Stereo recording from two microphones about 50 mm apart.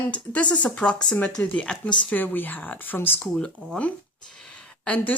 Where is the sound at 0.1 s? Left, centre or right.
Left.